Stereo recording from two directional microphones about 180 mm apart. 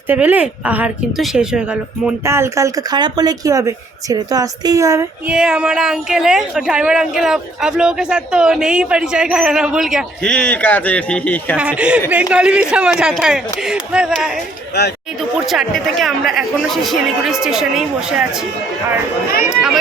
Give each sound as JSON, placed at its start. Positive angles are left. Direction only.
{"t": 0.1, "sound": "speech", "side_deg": -10}
{"t": 5.3, "sound": "speech", "side_deg": -5}
{"t": 11.5, "sound": "speech", "side_deg": -5}
{"t": 19.5, "sound": "speech", "side_deg": -5}